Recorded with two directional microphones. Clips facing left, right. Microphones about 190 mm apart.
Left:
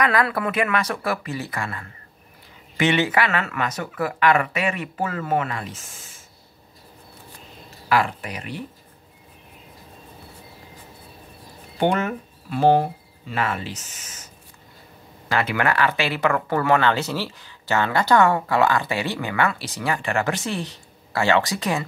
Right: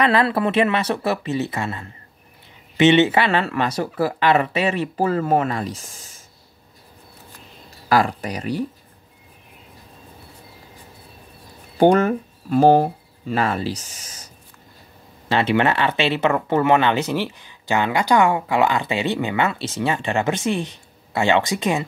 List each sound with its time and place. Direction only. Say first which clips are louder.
0.0 s speech: right 3 dB; 30° right (ahead or behind)
7.9 s speech: right 3 dB; 40° right (ahead or behind)
11.8 s speech: right 7 dB; 40° right (ahead or behind)
15.2 s speech: right 4 dB; 25° right (ahead or behind)